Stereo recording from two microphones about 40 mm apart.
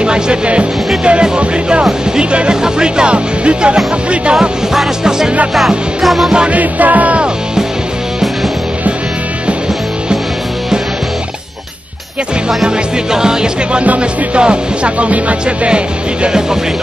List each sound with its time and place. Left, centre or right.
0.0 s speech: right
6.0 s music: centre
6.5 s music: right
12.6 s speech: centre
13.8 s music: right
15.4 s speech: right